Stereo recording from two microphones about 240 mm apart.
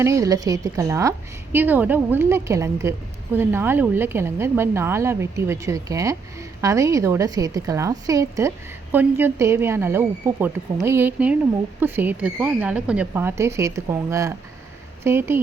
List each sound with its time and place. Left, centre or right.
0.0 s a woman's voice: centre